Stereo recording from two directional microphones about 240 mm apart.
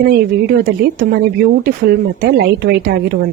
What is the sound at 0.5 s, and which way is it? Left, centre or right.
Speech, right.